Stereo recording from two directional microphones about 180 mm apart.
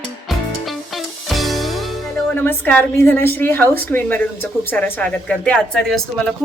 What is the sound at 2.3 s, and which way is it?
A woman's voice, 10° left (ahead or behind).